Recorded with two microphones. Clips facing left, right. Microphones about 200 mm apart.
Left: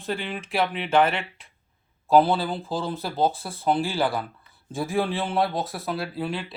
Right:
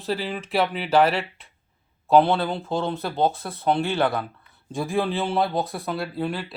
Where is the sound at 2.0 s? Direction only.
Centre (ahead or behind).